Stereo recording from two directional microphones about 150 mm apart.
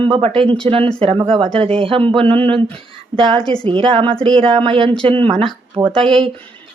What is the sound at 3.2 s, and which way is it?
Speech, 35° right (ahead or behind).